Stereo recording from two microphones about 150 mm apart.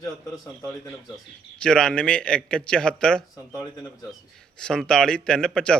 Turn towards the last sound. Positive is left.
turn(degrees=5)  # may be behind; listen again after turning